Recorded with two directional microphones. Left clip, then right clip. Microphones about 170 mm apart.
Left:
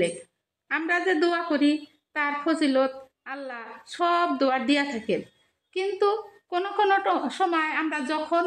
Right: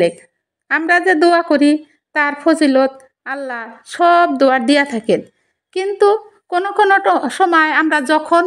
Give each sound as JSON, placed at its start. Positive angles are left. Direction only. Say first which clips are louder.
{"t": 0.7, "sound": "a woman's voice", "louder": "right 11 dB", "side_deg": -45}